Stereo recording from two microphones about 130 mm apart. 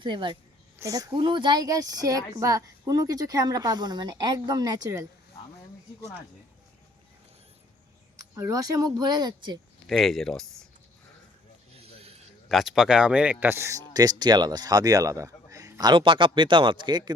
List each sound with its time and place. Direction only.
0.0 s a woman's voice: 40° right (ahead or behind)
0.8 s speech: 25° right (ahead or behind)
8.4 s speech: 25° right (ahead or behind)
9.8 s speech: centre (ahead or behind)
11.8 s a sound: 50° right (ahead or behind)
12.5 s speech: centre (ahead or behind); by 17.2 s 35° right (ahead or behind)